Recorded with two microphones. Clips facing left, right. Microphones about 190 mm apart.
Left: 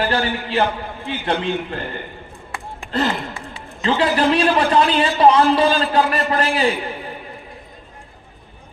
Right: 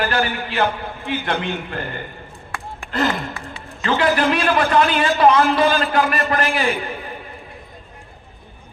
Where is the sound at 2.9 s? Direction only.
30° left (ahead or behind).